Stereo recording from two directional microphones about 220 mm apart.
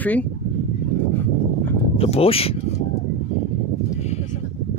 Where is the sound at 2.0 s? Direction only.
25° left (ahead or behind).